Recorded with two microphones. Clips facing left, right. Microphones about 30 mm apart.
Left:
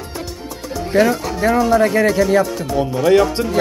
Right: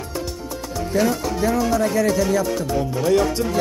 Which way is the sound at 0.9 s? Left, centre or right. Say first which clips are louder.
Left 5 dB; left.